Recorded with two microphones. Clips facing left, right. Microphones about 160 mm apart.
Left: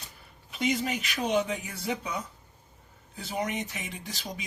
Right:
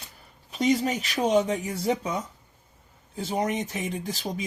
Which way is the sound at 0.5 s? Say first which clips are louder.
Right 5 dB; 35° right (ahead or behind).